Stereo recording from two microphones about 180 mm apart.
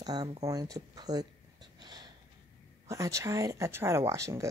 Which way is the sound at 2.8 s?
15° right (ahead or behind).